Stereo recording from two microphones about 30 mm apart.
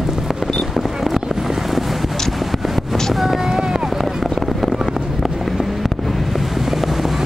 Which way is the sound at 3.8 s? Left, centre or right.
Centre.